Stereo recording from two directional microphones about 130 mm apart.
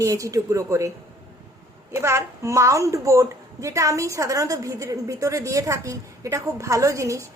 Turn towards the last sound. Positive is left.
turn(degrees=-25)  # may be behind; listen again after turning